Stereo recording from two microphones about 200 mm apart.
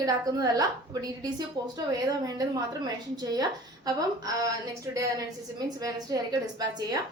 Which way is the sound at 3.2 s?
20° right (ahead or behind).